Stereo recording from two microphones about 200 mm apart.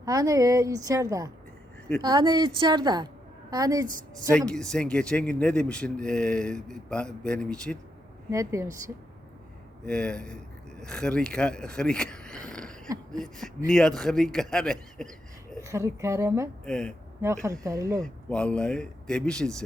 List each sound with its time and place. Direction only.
0.0 s a woman's voice: 15° right (ahead or behind)
4.4 s a man's voice: 5° left (ahead or behind)
8.3 s a woman's voice: 15° right (ahead or behind)
9.8 s a man's voice: 5° left (ahead or behind)
15.5 s a woman's voice: 15° right (ahead or behind)
16.6 s a man's voice: 5° left (ahead or behind)
17.2 s a woman's voice: 15° right (ahead or behind)
18.0 s a man's voice: 5° left (ahead or behind)